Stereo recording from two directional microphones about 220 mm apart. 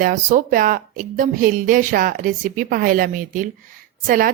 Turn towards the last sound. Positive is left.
turn(degrees=-40)  # may be behind; listen again after turning